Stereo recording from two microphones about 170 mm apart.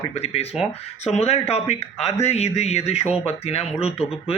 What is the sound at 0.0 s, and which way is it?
A man's voice, 35° left (ahead or behind).